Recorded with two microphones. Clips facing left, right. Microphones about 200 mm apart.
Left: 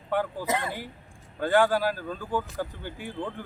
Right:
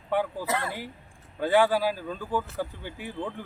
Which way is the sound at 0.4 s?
20° left (ahead or behind).